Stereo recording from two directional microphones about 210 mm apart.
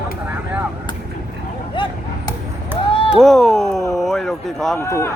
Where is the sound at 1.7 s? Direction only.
25° left (ahead or behind).